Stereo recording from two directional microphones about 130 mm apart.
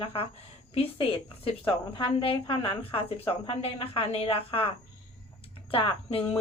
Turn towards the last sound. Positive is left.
turn(degrees=45)  # may be behind; listen again after turning